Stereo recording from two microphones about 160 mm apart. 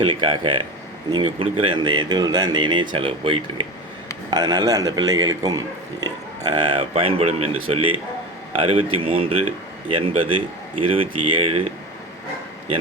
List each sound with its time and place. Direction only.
0.0 s speech: 30° right (ahead or behind)